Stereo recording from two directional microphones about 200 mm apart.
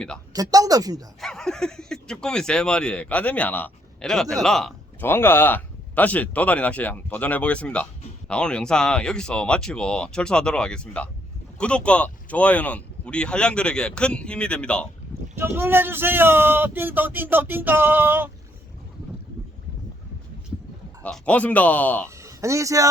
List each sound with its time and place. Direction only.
0.3 s speech: 15° right (ahead or behind)
1.2 s speech: 5° left (ahead or behind)
15.4 s speech: 10° right (ahead or behind)
21.0 s speech: 5° left (ahead or behind)
22.1 s speech: 15° right (ahead or behind)